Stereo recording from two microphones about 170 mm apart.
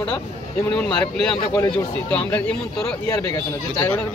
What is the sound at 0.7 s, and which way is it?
Speech, 5° left (ahead or behind).